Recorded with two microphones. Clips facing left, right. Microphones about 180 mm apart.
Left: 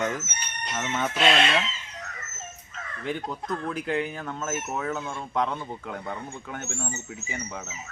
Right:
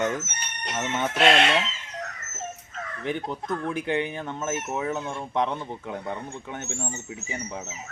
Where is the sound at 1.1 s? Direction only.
60° right (ahead or behind).